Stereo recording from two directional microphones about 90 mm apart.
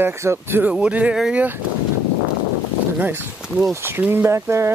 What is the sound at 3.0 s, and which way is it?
Speech, 25° right (ahead or behind).